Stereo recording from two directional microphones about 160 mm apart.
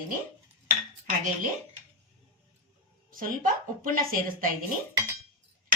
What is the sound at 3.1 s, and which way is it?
A woman's voice, 60° right (ahead or behind).